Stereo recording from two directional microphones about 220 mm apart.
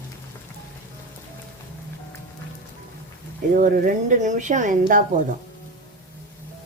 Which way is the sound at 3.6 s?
35° right (ahead or behind).